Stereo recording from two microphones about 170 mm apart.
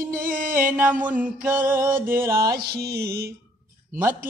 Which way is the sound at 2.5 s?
70° right (ahead or behind).